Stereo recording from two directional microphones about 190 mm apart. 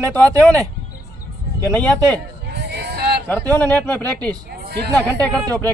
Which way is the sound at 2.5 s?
60° right (ahead or behind).